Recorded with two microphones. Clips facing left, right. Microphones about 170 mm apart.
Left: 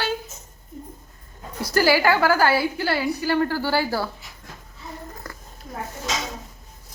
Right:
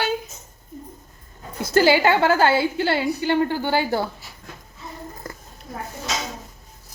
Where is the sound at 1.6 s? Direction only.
25° right (ahead or behind).